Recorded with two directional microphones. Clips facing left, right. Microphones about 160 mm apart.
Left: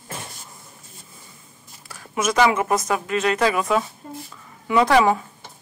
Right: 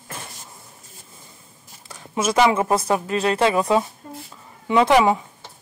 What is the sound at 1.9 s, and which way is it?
Speech, 25° right (ahead or behind).